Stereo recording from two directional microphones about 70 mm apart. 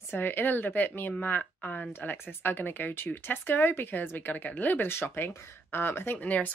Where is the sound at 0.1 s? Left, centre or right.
Left.